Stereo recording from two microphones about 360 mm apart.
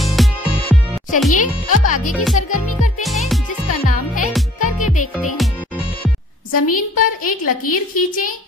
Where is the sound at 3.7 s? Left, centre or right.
Left.